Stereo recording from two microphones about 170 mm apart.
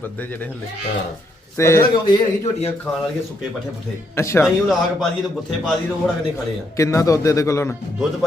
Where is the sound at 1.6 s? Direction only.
15° left (ahead or behind).